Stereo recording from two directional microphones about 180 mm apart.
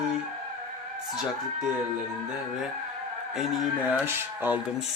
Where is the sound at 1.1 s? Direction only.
5° right (ahead or behind).